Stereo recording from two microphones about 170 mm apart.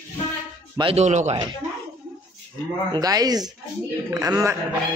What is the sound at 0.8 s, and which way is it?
Speech, 40° right (ahead or behind).